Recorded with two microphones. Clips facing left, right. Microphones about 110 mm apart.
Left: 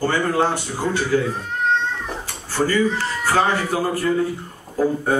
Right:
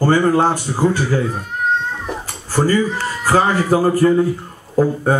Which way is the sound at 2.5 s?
40° right (ahead or behind).